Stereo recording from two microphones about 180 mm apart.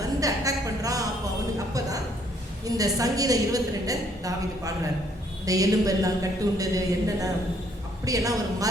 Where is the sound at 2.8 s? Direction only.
20° right (ahead or behind).